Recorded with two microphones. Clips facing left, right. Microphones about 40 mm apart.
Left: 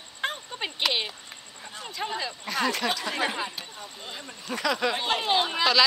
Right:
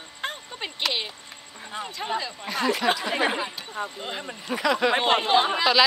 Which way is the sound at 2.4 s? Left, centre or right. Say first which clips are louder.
Right 3 dB; centre.